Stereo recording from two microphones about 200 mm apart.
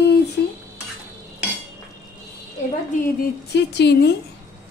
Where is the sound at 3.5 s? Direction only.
60° left (ahead or behind).